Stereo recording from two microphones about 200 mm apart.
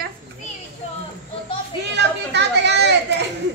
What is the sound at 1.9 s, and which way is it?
Chatter, 60° right (ahead or behind).